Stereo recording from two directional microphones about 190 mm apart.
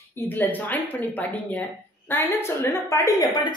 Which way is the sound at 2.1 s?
10° left (ahead or behind).